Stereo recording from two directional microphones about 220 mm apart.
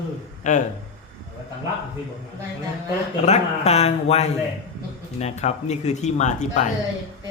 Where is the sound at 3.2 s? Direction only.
30° left (ahead or behind).